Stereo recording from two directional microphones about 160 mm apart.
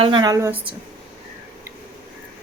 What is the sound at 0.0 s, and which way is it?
Speech, 30° right (ahead or behind).